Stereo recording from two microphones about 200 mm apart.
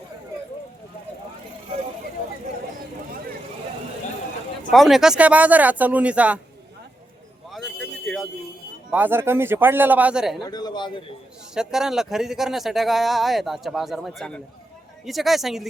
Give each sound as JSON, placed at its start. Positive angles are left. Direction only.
{"t": 4.7, "sound": "speech", "side_deg": 0}
{"t": 7.5, "sound": "a sound", "side_deg": 0}
{"t": 8.9, "sound": "speech", "side_deg": -10}
{"t": 10.4, "sound": "a man's voice", "side_deg": 20}
{"t": 11.5, "sound": "speech", "side_deg": -5}